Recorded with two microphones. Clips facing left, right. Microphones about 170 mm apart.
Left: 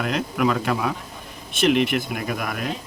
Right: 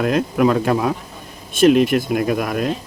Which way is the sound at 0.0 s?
40° right (ahead or behind).